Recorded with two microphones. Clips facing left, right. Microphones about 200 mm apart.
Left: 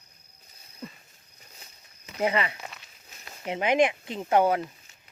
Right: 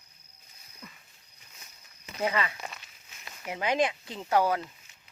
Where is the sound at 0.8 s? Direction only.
35° left (ahead or behind).